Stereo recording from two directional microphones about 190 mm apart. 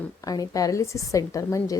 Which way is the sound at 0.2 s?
20° left (ahead or behind).